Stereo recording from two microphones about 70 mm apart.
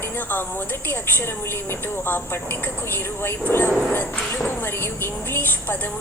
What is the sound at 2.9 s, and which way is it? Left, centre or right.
Speech, left.